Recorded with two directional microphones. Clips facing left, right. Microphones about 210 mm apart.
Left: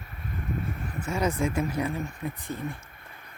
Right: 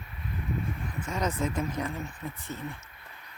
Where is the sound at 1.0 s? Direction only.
10° left (ahead or behind).